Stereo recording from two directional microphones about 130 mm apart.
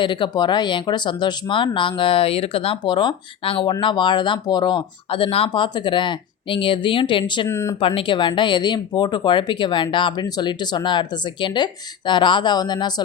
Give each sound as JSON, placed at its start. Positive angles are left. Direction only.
{"t": 0.0, "sound": "speech", "side_deg": 40}
{"t": 7.4, "sound": "speech", "side_deg": 20}
{"t": 7.8, "sound": "speech", "side_deg": 45}